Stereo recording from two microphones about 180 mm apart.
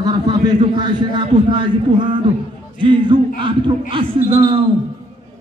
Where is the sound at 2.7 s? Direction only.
25° right (ahead or behind).